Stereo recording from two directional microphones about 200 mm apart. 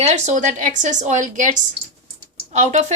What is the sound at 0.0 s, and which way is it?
Speech, 35° right (ahead or behind).